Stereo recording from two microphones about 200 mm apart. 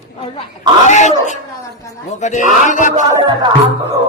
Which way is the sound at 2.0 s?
35° left (ahead or behind).